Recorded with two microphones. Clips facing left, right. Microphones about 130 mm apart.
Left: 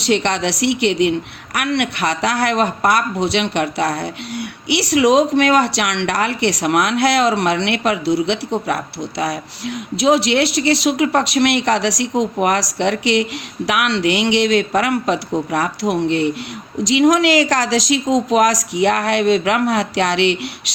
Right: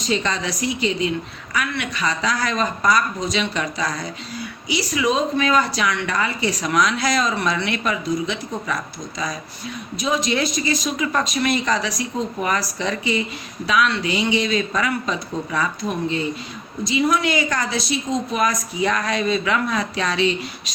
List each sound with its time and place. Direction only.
0.0 s speech: 70° left (ahead or behind)
16.8 s a woman's voice: 90° left